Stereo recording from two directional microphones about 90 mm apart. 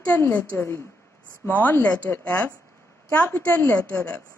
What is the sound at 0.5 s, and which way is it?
Speech, 30° left (ahead or behind).